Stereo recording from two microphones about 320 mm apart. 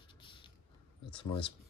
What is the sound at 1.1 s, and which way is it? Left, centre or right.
Speech, centre.